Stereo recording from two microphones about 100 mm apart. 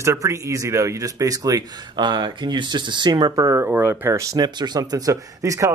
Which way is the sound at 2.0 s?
50° right (ahead or behind).